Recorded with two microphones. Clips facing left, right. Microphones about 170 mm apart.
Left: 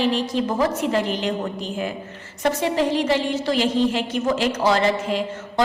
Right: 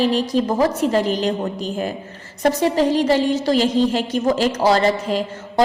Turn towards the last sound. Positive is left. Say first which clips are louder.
# right 3 dB
turn(degrees=-40)  # may be behind; listen again after turning